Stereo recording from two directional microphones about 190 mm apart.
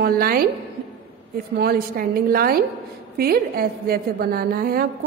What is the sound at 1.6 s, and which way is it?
A woman's voice, 50° right (ahead or behind).